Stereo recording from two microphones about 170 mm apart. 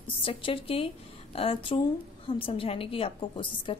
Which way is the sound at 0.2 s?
30° left (ahead or behind).